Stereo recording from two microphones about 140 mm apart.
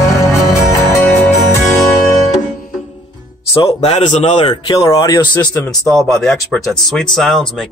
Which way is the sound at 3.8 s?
55° left (ahead or behind).